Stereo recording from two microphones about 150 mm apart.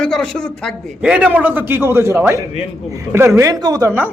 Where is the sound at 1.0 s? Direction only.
5° right (ahead or behind).